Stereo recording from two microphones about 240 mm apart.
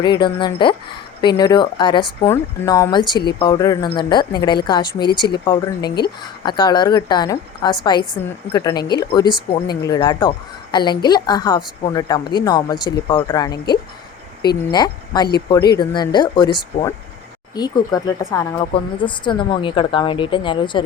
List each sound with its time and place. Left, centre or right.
0.0 s a woman's voice: centre
6.4 s a woman's voice: centre
17.5 s a woman's voice: centre